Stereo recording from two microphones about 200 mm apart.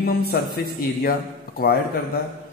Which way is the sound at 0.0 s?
50° left (ahead or behind).